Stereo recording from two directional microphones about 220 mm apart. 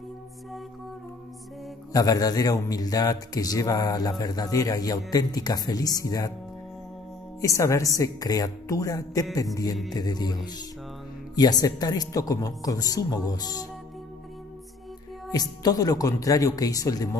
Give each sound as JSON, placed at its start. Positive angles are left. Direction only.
{"t": 1.9, "sound": "a man's voice", "side_deg": 15}
{"t": 7.3, "sound": "a man's voice", "side_deg": 15}
{"t": 15.3, "sound": "a man's voice", "side_deg": 15}